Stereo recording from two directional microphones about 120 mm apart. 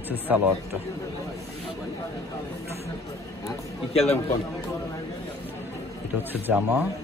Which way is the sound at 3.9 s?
60° left (ahead or behind).